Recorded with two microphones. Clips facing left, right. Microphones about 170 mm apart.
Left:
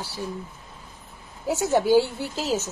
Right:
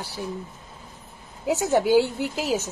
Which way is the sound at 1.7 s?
15° right (ahead or behind).